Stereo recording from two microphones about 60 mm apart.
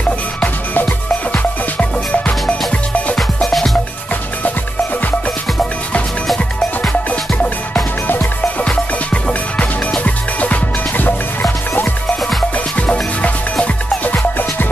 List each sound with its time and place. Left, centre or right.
0.4 s music: left
3.3 s music: centre
6.2 s music: centre
8.6 s music: left
12.5 s music: left